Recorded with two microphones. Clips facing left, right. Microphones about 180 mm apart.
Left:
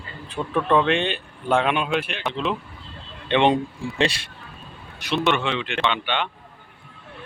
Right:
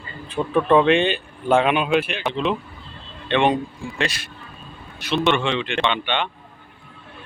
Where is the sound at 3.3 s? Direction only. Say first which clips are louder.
Even; 20° left (ahead or behind).